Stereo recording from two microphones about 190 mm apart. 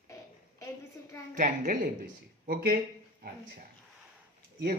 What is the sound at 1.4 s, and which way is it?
Speech, 45° right (ahead or behind).